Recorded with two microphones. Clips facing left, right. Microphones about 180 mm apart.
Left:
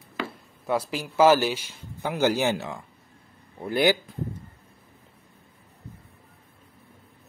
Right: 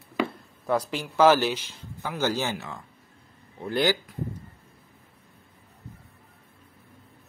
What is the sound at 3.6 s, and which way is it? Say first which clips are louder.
Speech: left 3 dB; 15° left (ahead or behind).